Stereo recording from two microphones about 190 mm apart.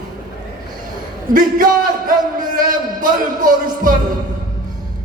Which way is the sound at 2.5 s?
45° right (ahead or behind).